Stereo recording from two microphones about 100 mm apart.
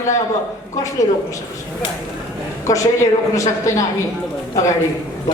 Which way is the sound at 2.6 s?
30° left (ahead or behind).